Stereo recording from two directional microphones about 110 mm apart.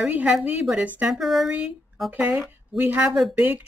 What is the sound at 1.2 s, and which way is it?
Speech, centre (ahead or behind).